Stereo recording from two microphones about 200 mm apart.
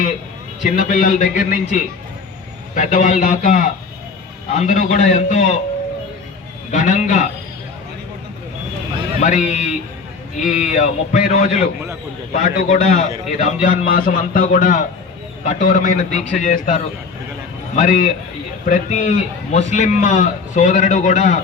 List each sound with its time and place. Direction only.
0.6 s a man's voice: 40° left (ahead or behind)
6.7 s a man's voice: 40° left (ahead or behind)
9.2 s a man's voice: 40° left (ahead or behind)